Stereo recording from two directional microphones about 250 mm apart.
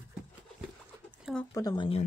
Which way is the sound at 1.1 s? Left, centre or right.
Centre.